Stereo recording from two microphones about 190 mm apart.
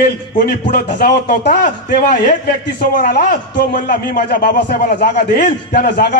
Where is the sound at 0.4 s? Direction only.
55° left (ahead or behind).